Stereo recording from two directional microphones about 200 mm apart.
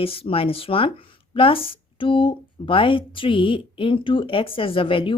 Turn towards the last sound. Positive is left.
turn(degrees=25)  # may be behind; listen again after turning